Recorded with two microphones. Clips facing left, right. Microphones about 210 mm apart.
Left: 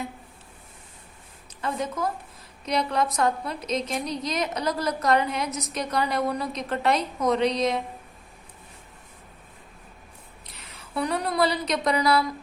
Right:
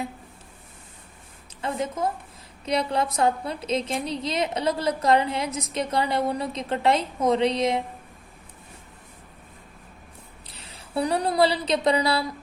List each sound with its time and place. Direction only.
1.6 s a woman's voice: 25° right (ahead or behind)
10.4 s speech: 30° right (ahead or behind)